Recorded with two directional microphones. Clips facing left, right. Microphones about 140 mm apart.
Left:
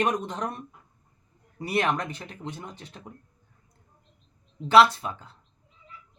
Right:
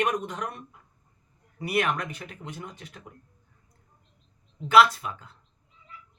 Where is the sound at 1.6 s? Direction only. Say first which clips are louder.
Left 1 dB; 30° left (ahead or behind).